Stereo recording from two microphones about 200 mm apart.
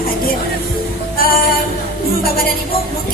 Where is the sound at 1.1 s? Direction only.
45° left (ahead or behind).